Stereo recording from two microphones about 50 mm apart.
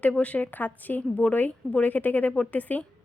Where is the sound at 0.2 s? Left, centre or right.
Left.